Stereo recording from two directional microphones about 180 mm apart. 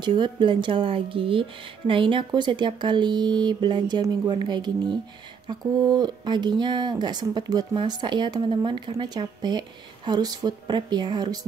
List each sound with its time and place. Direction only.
0.0 s speech: 25° right (ahead or behind)